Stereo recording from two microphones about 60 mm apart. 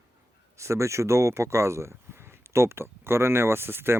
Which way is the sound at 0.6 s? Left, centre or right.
Right.